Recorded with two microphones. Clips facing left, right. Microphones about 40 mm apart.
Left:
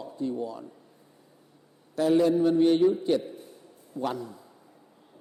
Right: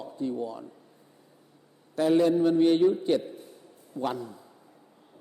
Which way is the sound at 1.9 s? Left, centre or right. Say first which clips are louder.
Even; right.